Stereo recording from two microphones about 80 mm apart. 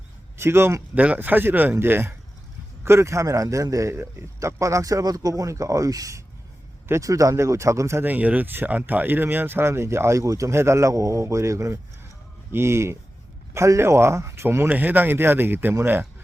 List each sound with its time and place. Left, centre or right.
0.3 s a man's voice: right
0.9 s a man's voice: centre; by 8.0 s right
8.0 s speech: right